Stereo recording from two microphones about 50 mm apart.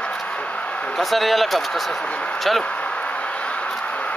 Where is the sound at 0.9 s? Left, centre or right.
Centre.